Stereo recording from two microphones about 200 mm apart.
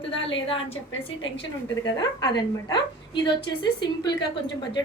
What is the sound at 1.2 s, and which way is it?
A woman's voice, 20° left (ahead or behind).